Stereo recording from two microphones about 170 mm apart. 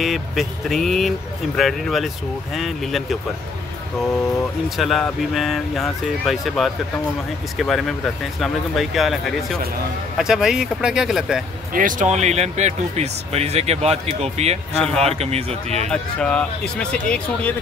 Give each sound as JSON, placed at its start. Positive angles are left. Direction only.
{"t": 0.0, "sound": "speech", "side_deg": 0}
{"t": 4.6, "sound": "speech", "side_deg": 0}
{"t": 11.7, "sound": "speech", "side_deg": -50}
{"t": 15.9, "sound": "speech", "side_deg": 5}